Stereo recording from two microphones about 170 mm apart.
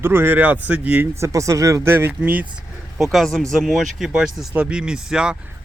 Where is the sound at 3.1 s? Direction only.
5° left (ahead or behind).